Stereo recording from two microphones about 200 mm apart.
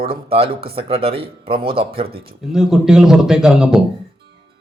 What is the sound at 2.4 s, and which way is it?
Speech, centre (ahead or behind).